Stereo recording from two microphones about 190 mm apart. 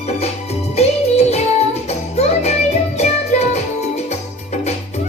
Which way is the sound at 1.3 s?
35° left (ahead or behind).